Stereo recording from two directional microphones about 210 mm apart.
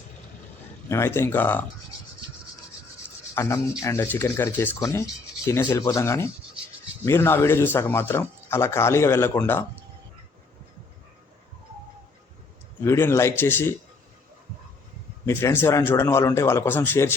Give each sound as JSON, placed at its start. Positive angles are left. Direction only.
{"t": 0.9, "sound": "a man's voice", "side_deg": 10}
{"t": 3.3, "sound": "a man's voice", "side_deg": 15}
{"t": 12.8, "sound": "a man's voice", "side_deg": 10}
{"t": 15.3, "sound": "a man's voice", "side_deg": 10}